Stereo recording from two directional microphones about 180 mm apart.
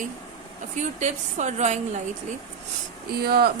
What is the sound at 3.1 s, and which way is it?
Speech, 60° right (ahead or behind).